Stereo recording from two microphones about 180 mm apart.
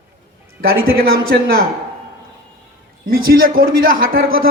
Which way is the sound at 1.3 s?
70° right (ahead or behind).